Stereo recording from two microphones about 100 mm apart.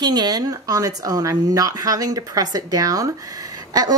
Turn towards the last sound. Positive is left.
turn(degrees=-40)  # may be behind; listen again after turning